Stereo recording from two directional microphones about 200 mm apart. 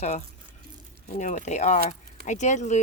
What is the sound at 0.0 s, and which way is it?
Speech, 35° left (ahead or behind).